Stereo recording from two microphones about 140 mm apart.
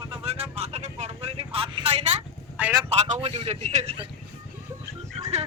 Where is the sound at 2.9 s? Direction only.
50° right (ahead or behind).